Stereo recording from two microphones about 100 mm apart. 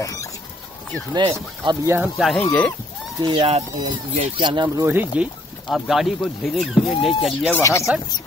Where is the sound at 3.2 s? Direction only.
50° right (ahead or behind).